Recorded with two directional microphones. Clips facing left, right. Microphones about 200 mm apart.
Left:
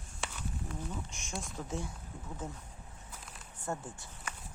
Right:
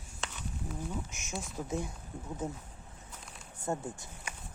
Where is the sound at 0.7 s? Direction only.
5° right (ahead or behind).